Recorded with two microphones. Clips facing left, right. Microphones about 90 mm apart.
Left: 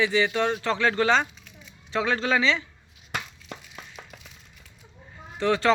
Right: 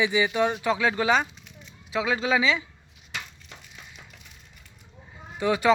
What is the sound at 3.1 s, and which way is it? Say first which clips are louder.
Crushing: left 5 dB; 50° left (ahead or behind).